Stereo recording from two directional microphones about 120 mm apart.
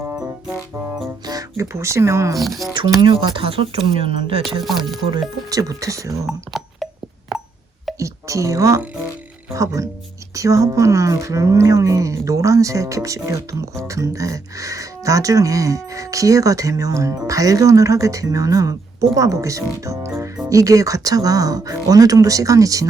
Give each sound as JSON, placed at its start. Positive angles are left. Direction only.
{"t": 1.2, "sound": "speech", "side_deg": -30}
{"t": 2.4, "sound": "speech", "side_deg": 0}
{"t": 3.1, "sound": "speech", "side_deg": -50}
{"t": 4.6, "sound": "speech", "side_deg": 0}
{"t": 5.5, "sound": "speech", "side_deg": -30}
{"t": 6.2, "sound": "a sound", "side_deg": 0}
{"t": 7.9, "sound": "a sound", "side_deg": -25}
{"t": 9.6, "sound": "speech", "side_deg": -25}